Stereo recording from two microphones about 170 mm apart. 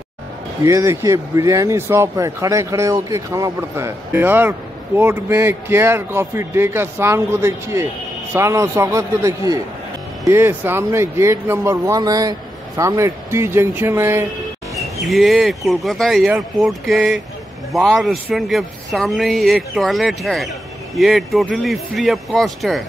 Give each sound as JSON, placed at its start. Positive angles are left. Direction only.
{"t": 0.7, "sound": "speech", "side_deg": -15}
{"t": 14.8, "sound": "speech", "side_deg": 0}